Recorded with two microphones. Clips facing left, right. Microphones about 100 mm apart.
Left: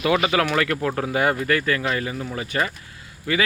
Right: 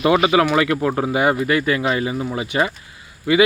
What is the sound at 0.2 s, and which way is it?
Speech, 10° right (ahead or behind).